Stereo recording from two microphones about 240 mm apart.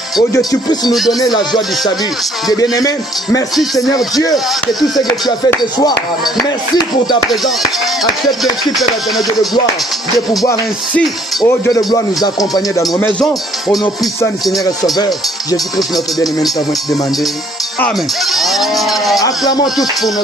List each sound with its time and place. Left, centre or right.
0.3 s music: centre
2.5 s music: centre
3.5 s speech: centre
11.4 s music: centre
15.0 s music: centre
16.4 s speech: centre